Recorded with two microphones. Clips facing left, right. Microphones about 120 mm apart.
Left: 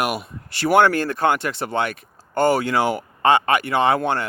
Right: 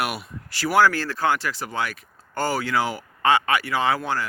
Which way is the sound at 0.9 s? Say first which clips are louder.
Left 4 dB; 55° left (ahead or behind).